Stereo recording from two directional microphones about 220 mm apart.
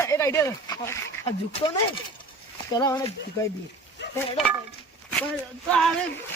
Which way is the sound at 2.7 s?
15° left (ahead or behind).